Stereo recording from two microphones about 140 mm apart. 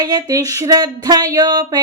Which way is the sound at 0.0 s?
25° right (ahead or behind).